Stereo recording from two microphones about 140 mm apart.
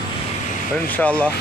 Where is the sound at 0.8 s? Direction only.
10° left (ahead or behind).